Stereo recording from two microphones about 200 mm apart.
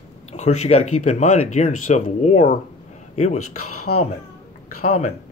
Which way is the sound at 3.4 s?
90° left.